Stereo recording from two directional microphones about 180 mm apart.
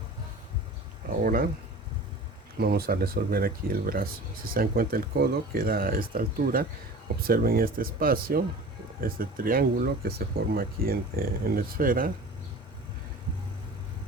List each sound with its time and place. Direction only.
1.2 s speech: 50° right (ahead or behind)
2.6 s speech: 60° right (ahead or behind)